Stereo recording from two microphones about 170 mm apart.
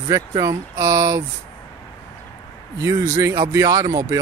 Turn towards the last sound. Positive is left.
turn(degrees=-20)  # may be behind; listen again after turning